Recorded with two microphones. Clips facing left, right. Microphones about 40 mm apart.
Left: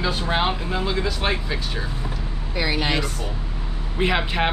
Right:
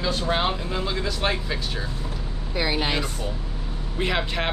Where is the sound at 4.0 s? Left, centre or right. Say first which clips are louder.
Left 4 dB; centre.